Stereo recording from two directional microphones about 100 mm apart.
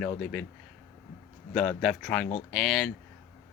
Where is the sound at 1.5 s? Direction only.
5° left (ahead or behind).